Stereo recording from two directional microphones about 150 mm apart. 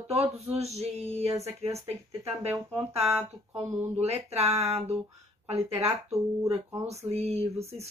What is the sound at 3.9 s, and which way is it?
Speech, 45° right (ahead or behind).